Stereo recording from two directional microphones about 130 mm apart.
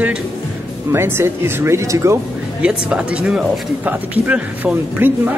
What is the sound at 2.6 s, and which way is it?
Speech, 10° right (ahead or behind).